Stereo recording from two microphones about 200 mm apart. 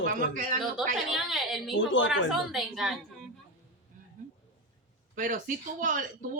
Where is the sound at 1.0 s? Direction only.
Centre (ahead or behind).